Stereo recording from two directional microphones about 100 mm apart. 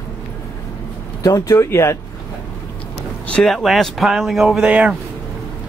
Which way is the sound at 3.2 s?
5° left (ahead or behind).